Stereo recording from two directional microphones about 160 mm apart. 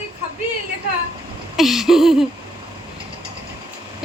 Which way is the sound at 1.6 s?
Centre (ahead or behind).